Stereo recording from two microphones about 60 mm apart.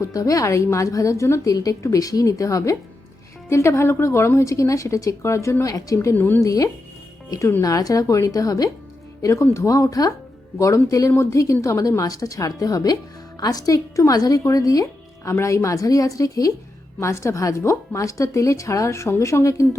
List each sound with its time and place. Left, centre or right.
0.0 s speech: left
0.4 s a woman's voice: left
3.5 s a woman's voice: left
4.4 s a woman's voice: left
5.2 s a woman's voice: left
5.6 s speech: left
6.1 s a woman's voice: left
6.4 s a woman's voice: left
7.6 s a woman's voice: left
9.2 s a woman's voice: left
10.6 s a woman's voice: left
15.3 s a woman's voice: left
17.0 s a woman's voice: left